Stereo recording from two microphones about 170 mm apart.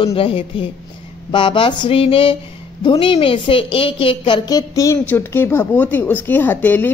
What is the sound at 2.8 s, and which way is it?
A woman's voice, 30° left (ahead or behind).